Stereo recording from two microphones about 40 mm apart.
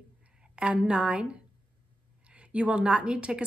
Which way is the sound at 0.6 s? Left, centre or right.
Right.